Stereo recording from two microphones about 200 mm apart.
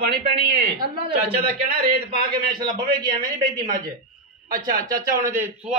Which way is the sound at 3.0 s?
20° right (ahead or behind).